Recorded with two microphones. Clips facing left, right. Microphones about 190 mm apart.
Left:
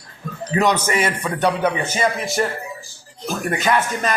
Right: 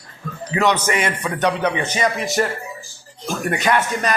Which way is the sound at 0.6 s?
10° left (ahead or behind).